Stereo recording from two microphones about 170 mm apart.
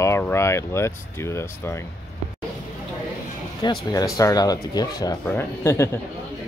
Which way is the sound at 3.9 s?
20° left (ahead or behind).